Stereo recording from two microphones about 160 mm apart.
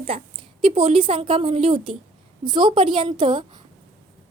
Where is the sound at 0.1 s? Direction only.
30° right (ahead or behind).